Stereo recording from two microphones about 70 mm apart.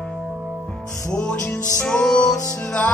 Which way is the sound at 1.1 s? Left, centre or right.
Centre.